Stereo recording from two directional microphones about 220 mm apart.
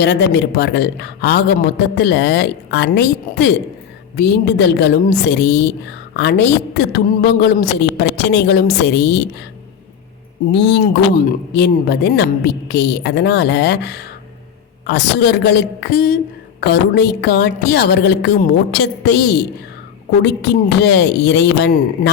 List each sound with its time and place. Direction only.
0.0 s speech: 50° left (ahead or behind)
10.5 s speech: 50° left (ahead or behind)